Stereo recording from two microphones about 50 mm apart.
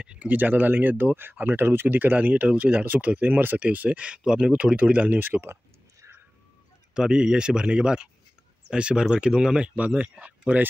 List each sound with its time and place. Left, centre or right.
0.0 s speech: right
4.0 s speech: right
6.9 s speech: centre
9.8 s speech: right